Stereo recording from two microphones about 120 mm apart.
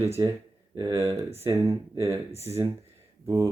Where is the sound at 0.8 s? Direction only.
25° right (ahead or behind).